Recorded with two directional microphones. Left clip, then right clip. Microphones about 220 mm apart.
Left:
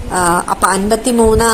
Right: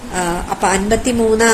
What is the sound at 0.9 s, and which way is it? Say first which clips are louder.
Speech: left 3 dB; 25° left (ahead or behind).